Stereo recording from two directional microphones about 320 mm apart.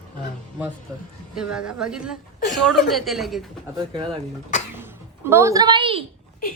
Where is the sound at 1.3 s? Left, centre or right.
Centre.